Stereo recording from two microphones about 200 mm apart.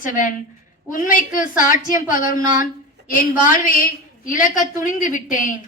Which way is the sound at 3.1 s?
45° left (ahead or behind).